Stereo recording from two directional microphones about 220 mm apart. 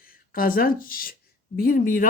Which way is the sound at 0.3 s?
40° left (ahead or behind).